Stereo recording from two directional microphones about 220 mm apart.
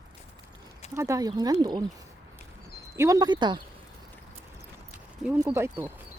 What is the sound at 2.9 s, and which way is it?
Speech, 15° right (ahead or behind).